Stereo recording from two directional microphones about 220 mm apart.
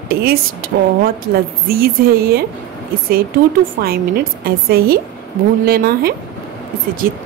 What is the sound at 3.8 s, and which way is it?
A woman's voice, 45° right (ahead or behind).